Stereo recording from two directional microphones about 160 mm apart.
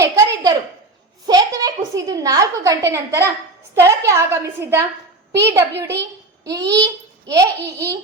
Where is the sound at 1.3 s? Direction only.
25° right (ahead or behind).